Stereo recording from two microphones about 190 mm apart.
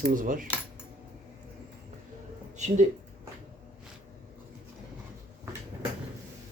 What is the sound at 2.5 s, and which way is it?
Speech, 40° right (ahead or behind).